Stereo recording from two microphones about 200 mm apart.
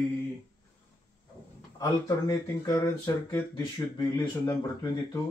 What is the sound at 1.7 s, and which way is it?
Speech, 15° left (ahead or behind).